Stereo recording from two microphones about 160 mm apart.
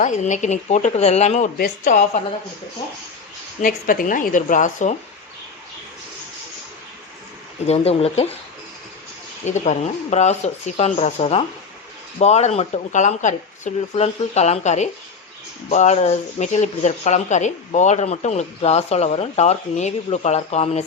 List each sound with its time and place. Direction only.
0.0 s speech: 50° left (ahead or behind)
3.6 s a woman's voice: 60° left (ahead or behind)
7.7 s speech: 40° left (ahead or behind)
9.5 s speech: 45° left (ahead or behind)